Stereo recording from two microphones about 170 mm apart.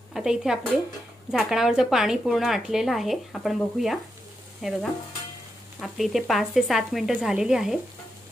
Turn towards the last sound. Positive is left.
turn(degrees=-5)  # may be behind; listen again after turning